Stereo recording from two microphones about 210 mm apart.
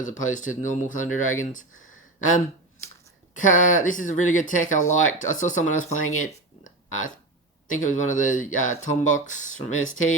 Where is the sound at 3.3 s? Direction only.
40° left (ahead or behind).